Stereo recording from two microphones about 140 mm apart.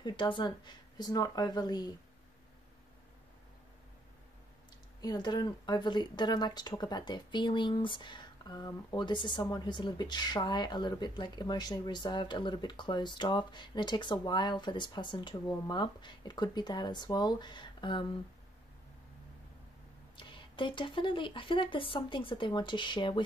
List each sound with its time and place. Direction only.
0.0 s speech: 35° left (ahead or behind)
5.0 s speech: 30° left (ahead or behind)
20.2 s speech: 35° left (ahead or behind)